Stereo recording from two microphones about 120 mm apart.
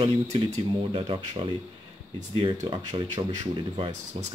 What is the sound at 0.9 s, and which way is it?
Speech, 45° right (ahead or behind).